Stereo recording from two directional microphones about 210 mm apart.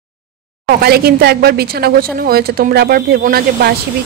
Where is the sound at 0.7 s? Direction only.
50° right (ahead or behind).